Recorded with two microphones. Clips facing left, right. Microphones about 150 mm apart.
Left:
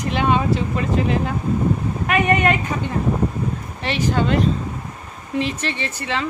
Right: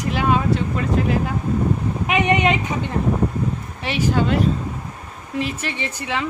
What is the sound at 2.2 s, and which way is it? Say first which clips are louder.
Speech: even; 20° right (ahead or behind).